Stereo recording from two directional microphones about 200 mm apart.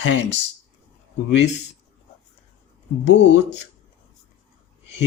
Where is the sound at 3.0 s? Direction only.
60° left (ahead or behind).